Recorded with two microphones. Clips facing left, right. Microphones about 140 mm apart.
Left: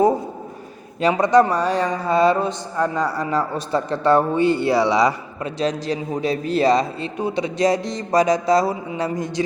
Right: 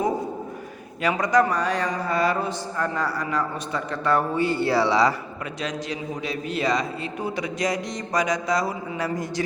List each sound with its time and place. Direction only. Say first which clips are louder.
1.0 s a man's voice: left 5 dB; 25° left (ahead or behind)
5.5 s a man's voice: left 8 dB; 35° left (ahead or behind)